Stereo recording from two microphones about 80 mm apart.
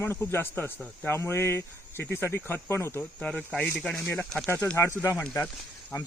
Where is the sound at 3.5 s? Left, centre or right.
Left.